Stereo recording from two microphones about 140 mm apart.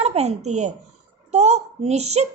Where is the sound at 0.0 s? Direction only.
50° right (ahead or behind).